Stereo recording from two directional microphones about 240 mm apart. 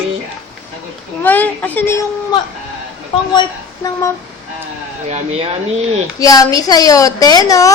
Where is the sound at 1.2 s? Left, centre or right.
Centre.